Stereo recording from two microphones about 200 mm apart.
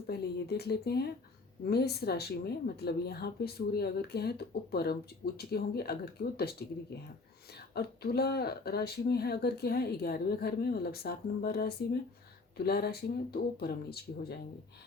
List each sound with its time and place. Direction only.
0.1 s a woman's voice: 55° left (ahead or behind)
7.7 s a woman's voice: 50° left (ahead or behind)